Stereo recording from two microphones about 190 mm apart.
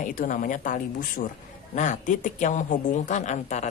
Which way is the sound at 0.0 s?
45° left (ahead or behind).